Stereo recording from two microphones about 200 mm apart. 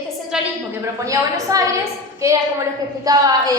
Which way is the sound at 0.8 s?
15° right (ahead or behind).